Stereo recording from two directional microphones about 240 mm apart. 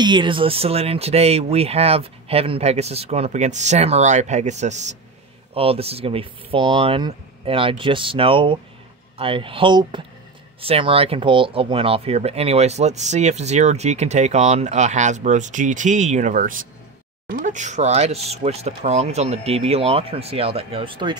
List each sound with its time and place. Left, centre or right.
0.0 s speech: centre